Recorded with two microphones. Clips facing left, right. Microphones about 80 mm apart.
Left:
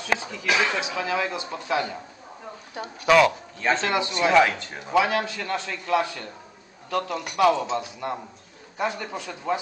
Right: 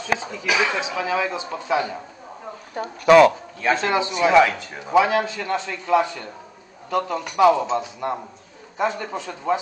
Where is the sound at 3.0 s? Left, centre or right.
Right.